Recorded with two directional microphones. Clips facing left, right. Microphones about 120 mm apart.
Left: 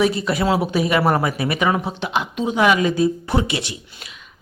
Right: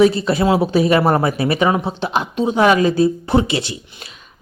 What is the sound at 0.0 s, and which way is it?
Speech, 30° right (ahead or behind).